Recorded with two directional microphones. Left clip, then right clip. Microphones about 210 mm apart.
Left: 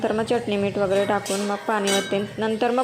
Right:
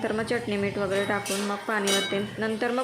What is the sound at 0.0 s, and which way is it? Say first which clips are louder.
Speech: left 5 dB; 10° left (ahead or behind).